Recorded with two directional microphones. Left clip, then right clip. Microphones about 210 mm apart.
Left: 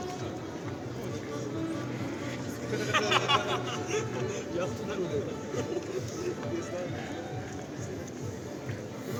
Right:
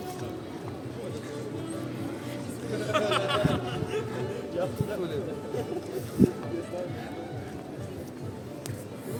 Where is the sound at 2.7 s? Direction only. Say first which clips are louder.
Even; 25° left (ahead or behind).